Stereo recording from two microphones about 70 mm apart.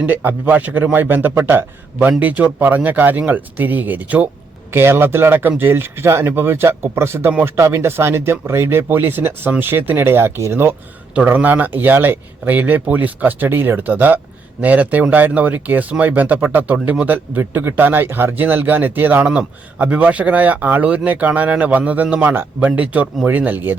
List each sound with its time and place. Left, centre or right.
0.0 s speech: right
11.3 s speech: right